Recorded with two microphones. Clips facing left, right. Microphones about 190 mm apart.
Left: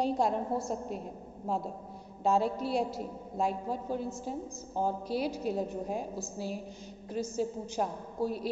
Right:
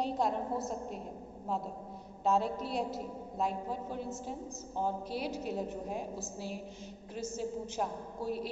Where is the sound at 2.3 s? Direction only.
5° left (ahead or behind).